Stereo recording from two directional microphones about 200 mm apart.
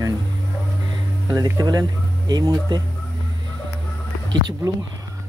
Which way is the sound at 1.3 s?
20° right (ahead or behind).